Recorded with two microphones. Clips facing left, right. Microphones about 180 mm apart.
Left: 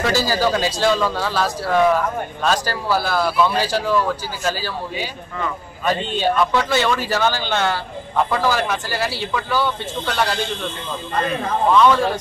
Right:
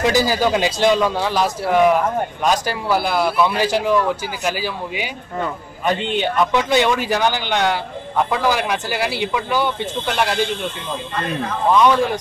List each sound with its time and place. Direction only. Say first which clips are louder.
0.1 s speech: right 2 dB; 15° right (ahead or behind)
11.7 s speech: right 1 dB; 15° right (ahead or behind)